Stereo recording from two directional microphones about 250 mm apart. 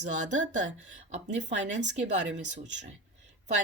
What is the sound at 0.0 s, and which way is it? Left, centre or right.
Speech, right.